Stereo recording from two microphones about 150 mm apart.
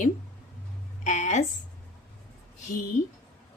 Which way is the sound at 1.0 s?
55° left (ahead or behind).